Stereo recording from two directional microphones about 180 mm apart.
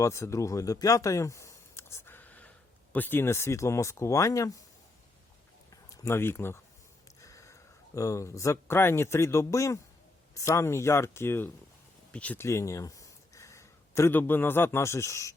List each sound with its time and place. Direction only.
0.0 s speech: 15° left (ahead or behind)
5.7 s speech: 15° left (ahead or behind)